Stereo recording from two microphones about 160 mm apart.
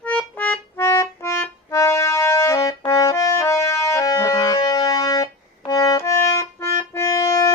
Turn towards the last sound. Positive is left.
turn(degrees=20)  # may be behind; listen again after turning